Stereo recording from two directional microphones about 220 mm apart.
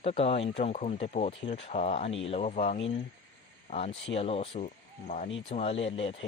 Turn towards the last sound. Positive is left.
turn(degrees=25)  # may be behind; listen again after turning